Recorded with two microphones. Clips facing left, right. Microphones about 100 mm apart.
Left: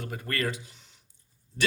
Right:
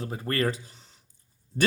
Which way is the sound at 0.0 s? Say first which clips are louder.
Right 4 dB; 35° right (ahead or behind).